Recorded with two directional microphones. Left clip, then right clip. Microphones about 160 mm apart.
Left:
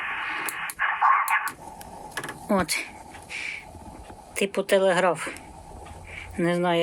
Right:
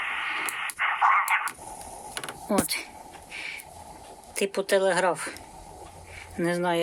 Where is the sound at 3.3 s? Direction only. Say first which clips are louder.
Left 4 dB; centre (ahead or behind).